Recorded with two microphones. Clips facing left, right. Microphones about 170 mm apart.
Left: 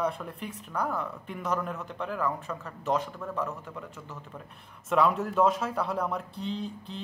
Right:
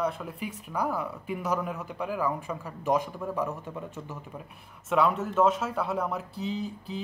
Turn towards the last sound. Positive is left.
turn(degrees=-5)  # may be behind; listen again after turning